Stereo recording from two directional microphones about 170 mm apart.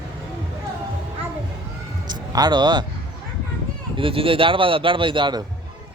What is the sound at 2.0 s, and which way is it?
Music, 25° right (ahead or behind).